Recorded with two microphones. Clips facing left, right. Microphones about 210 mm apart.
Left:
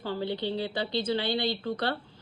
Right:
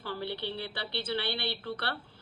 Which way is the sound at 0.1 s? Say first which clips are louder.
Left 5 dB; 15° left (ahead or behind).